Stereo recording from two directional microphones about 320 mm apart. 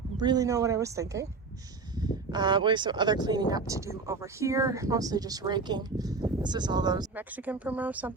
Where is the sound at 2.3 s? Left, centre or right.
Centre.